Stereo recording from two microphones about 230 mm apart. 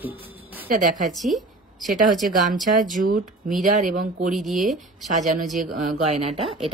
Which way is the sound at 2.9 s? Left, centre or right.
Right.